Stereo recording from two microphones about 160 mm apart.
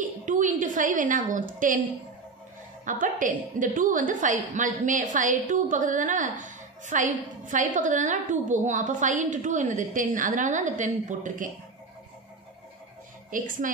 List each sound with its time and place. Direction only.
0.2 s a woman's voice: 55° right (ahead or behind)
2.8 s a woman's voice: 55° right (ahead or behind)
13.3 s a woman's voice: 55° right (ahead or behind)